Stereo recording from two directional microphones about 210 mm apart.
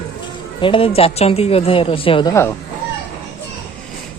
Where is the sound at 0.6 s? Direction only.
25° left (ahead or behind).